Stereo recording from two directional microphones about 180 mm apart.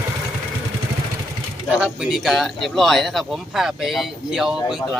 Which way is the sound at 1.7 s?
5° right (ahead or behind).